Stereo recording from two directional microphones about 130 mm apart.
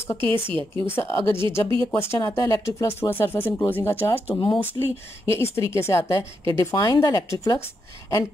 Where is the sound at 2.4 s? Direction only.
25° left (ahead or behind).